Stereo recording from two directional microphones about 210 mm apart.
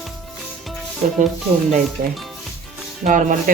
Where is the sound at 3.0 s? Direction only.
35° right (ahead or behind).